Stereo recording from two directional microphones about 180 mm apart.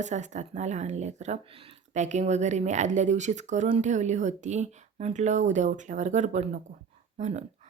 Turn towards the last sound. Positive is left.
turn(degrees=-40)  # may be behind; listen again after turning